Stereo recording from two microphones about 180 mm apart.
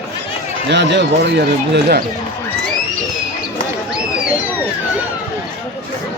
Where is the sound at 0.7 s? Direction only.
75° right (ahead or behind).